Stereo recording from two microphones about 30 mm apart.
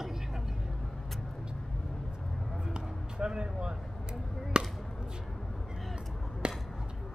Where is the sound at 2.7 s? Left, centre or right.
Right.